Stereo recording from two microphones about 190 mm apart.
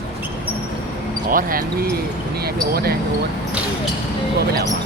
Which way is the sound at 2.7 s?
55° right (ahead or behind).